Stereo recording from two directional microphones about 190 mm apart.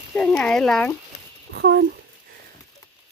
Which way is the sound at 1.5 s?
70° right (ahead or behind).